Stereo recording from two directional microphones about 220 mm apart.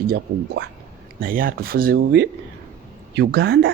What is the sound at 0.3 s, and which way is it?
Speech, 45° right (ahead or behind).